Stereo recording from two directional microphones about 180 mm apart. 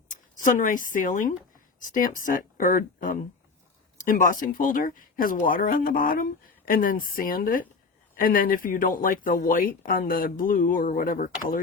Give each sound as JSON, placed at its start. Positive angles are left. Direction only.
{"t": 0.1, "sound": "speech", "side_deg": 45}